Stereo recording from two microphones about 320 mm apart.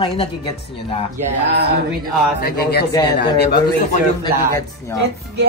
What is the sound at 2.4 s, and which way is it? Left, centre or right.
Speech, left.